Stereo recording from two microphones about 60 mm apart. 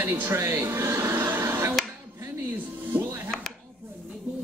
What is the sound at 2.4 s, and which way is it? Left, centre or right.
Music, right.